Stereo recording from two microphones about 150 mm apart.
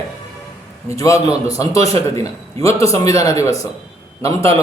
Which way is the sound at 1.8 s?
40° right (ahead or behind).